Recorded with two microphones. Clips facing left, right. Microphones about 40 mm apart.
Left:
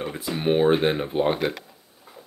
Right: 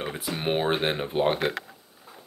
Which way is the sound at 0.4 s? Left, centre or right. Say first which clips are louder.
Left 6 dB; centre.